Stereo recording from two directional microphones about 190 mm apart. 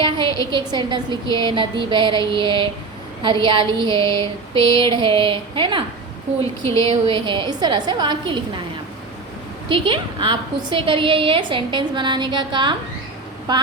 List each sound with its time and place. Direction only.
0.0 s a woman's voice: 25° right (ahead or behind)
6.4 s speech: 15° left (ahead or behind)
7.1 s a woman's voice: 25° right (ahead or behind)
9.6 s a woman's voice: 25° right (ahead or behind)